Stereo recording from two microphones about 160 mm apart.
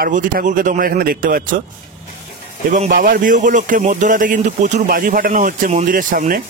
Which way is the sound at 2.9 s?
60° right (ahead or behind).